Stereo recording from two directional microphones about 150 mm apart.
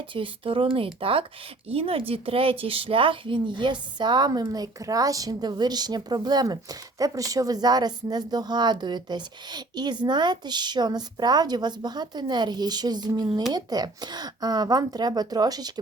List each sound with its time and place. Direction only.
0.1 s speech: 35° right (ahead or behind)